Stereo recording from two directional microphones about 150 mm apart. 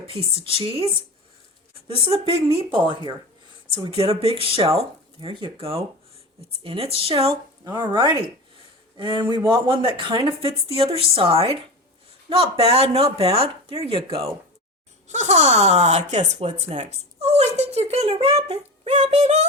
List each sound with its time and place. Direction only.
0.1 s speech: 40° right (ahead or behind)
7.6 s speech: 25° right (ahead or behind)
15.0 s speech: 50° right (ahead or behind)